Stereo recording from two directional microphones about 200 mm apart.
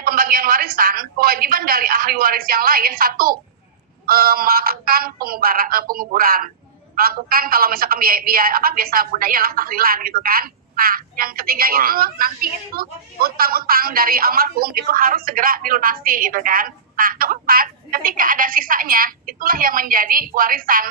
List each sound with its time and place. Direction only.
0.0 s a woman's voice: 45° right (ahead or behind)